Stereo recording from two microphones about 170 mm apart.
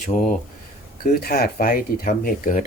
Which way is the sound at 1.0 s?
60° left (ahead or behind).